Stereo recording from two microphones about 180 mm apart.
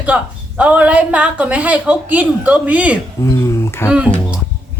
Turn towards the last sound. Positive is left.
turn(degrees=-5)  # may be behind; listen again after turning